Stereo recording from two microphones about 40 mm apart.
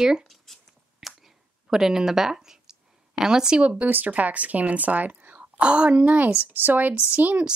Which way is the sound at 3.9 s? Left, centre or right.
Right.